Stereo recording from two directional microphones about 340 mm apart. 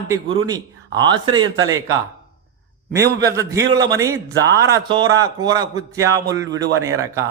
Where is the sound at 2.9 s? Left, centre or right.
Centre.